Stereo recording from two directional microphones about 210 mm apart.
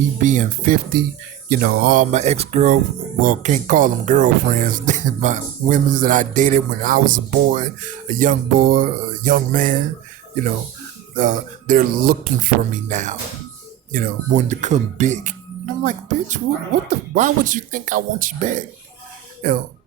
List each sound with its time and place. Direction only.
0.2 s speech: 35° right (ahead or behind)
11.2 s speech: 40° right (ahead or behind)